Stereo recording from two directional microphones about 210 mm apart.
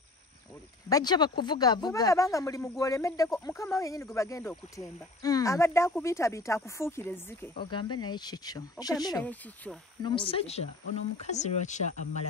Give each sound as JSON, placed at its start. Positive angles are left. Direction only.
{"t": 0.8, "sound": "speech", "side_deg": 20}
{"t": 7.6, "sound": "speech", "side_deg": 20}